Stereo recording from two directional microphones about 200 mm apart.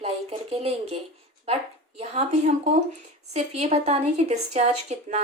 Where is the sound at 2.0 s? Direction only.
30° right (ahead or behind).